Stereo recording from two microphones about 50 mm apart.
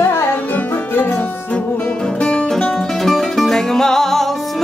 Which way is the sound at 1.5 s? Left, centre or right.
Left.